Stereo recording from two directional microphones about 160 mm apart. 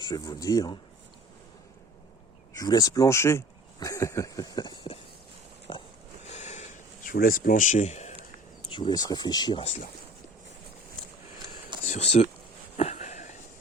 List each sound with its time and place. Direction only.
0.0 s speech: 25° left (ahead or behind)
2.5 s speech: 20° left (ahead or behind)
5.7 s a sound: 30° left (ahead or behind)
6.2 s a sound: 40° left (ahead or behind)
7.0 s speech: 60° left (ahead or behind)
8.6 s speech: 30° left (ahead or behind)
9.6 s speech: 45° left (ahead or behind)
11.9 s speech: 45° left (ahead or behind)
12.7 s a sound: 45° left (ahead or behind)